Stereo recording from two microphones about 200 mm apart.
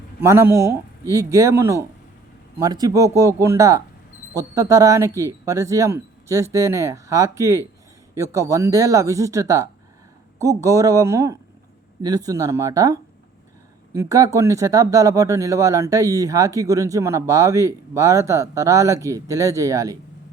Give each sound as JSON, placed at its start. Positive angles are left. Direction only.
{"t": 0.2, "sound": "speech", "side_deg": -10}